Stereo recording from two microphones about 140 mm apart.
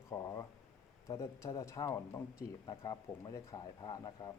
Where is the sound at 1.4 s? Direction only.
20° left (ahead or behind).